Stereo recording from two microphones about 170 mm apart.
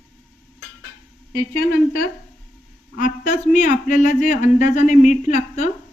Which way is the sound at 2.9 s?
50° left (ahead or behind).